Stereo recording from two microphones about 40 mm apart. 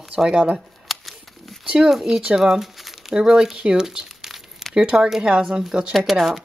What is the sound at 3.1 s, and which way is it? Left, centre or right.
Speech, centre.